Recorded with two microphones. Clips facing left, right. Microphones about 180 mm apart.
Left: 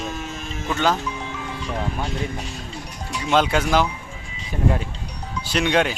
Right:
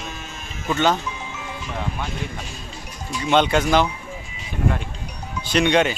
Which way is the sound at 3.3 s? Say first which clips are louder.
Right 1 dB; centre (ahead or behind).